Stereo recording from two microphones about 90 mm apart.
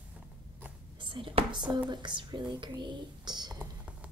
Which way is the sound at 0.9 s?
70° right (ahead or behind).